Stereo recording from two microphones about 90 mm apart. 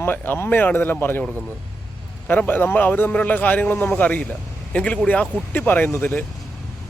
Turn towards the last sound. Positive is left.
turn(degrees=25)  # may be behind; listen again after turning